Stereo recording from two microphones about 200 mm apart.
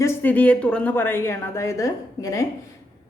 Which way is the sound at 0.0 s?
10° left (ahead or behind).